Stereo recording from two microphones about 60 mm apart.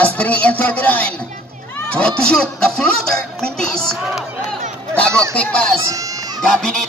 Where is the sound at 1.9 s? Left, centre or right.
Centre.